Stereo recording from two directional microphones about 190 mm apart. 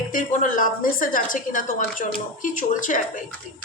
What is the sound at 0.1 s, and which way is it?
Speech, 45° left (ahead or behind).